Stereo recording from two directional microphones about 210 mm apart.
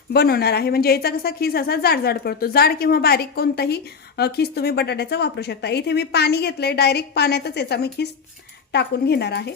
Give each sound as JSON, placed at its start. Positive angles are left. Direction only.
{"t": 0.1, "sound": "speech", "side_deg": 50}